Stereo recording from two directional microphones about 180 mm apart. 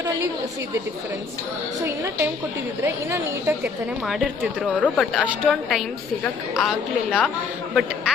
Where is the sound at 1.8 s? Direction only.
15° right (ahead or behind).